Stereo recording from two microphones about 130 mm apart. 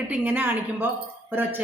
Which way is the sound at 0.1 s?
15° right (ahead or behind).